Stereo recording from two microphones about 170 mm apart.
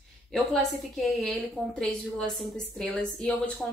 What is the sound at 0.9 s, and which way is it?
A woman's voice, centre (ahead or behind).